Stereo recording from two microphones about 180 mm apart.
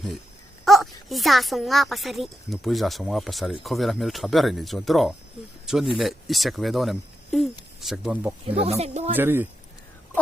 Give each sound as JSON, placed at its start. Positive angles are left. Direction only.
{"t": 0.6, "sound": "speech", "side_deg": 0}
{"t": 8.4, "sound": "speech", "side_deg": -35}
{"t": 9.1, "sound": "speech", "side_deg": -10}